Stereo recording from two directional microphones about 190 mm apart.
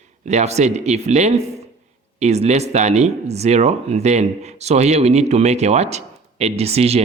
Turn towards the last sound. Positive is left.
turn(degrees=-35)  # may be behind; listen again after turning